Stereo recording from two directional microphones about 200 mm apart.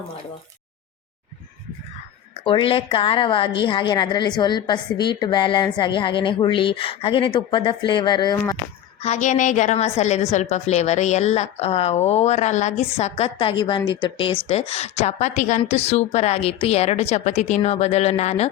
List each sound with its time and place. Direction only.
2.3 s a woman's voice: 25° left (ahead or behind)
9.0 s a woman's voice: 35° left (ahead or behind)